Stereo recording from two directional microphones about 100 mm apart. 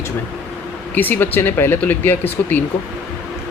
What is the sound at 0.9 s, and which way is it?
Speech, 20° left (ahead or behind).